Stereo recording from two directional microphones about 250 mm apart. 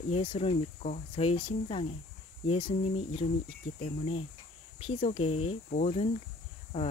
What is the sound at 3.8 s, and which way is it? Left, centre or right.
Speech, left.